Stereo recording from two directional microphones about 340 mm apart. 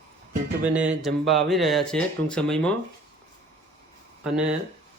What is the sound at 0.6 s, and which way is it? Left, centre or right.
Speech, centre.